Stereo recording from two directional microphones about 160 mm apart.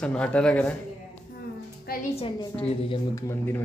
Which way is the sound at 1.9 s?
70° left (ahead or behind).